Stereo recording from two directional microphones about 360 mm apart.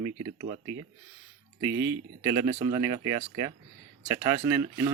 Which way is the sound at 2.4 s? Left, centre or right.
Centre.